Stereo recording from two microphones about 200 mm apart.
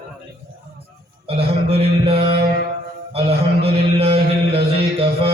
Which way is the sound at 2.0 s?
30° right (ahead or behind).